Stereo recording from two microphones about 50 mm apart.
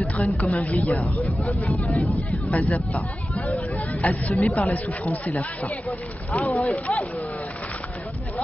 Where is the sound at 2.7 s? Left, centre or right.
Left.